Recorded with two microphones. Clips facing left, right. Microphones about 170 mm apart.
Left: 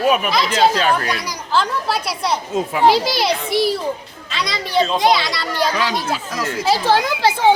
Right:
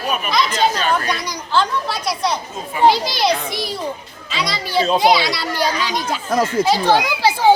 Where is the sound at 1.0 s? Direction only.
5° left (ahead or behind).